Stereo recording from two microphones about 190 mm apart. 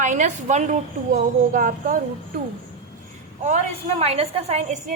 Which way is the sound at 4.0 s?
30° right (ahead or behind).